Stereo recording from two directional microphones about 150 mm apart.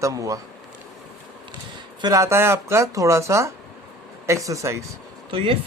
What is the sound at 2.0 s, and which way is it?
Speech, 25° right (ahead or behind).